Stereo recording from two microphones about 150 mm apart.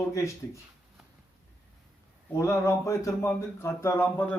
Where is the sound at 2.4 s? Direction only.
20° left (ahead or behind).